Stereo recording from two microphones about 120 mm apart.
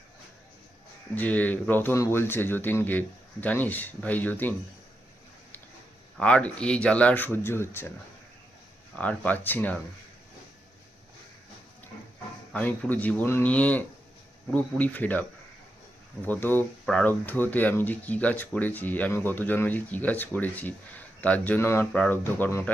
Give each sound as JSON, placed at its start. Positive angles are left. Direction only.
{"t": 1.1, "sound": "speech", "side_deg": 15}
{"t": 6.1, "sound": "speech", "side_deg": 10}
{"t": 9.0, "sound": "speech", "side_deg": 10}
{"t": 12.5, "sound": "speech", "side_deg": 10}
{"t": 16.2, "sound": "speech", "side_deg": 15}